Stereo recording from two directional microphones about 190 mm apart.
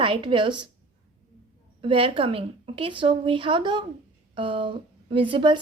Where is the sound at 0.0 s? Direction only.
25° right (ahead or behind).